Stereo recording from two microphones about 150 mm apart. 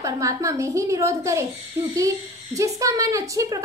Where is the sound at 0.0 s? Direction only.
20° right (ahead or behind).